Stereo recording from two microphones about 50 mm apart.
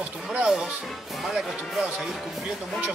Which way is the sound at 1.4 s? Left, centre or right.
Centre.